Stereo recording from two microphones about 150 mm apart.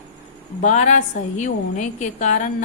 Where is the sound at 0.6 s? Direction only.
50° left (ahead or behind).